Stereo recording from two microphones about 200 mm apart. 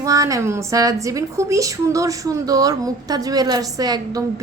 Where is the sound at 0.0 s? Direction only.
15° right (ahead or behind).